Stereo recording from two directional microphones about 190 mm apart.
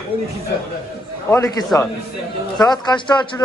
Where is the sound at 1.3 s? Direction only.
15° left (ahead or behind).